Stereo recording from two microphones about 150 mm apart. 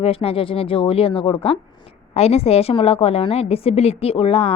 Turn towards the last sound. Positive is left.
turn(degrees=40)  # may be behind; listen again after turning